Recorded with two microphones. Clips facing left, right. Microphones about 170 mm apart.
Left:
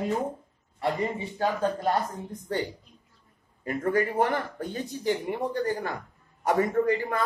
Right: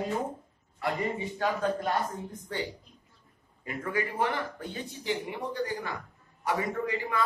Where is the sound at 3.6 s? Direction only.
45° left (ahead or behind).